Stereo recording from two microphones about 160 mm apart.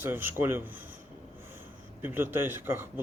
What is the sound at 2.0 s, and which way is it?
Speech, 15° right (ahead or behind).